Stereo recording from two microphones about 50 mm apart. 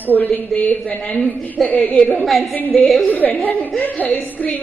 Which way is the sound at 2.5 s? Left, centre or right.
Left.